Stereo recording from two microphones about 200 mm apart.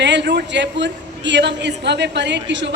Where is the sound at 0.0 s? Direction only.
60° right (ahead or behind).